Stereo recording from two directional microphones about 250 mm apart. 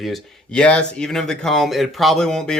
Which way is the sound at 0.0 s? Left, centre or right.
Centre.